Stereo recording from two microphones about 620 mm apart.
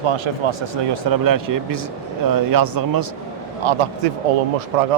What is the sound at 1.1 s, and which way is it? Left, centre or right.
Speech, right.